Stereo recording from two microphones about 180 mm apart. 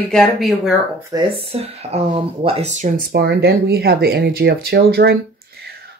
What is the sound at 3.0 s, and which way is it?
Speech, 60° right (ahead or behind).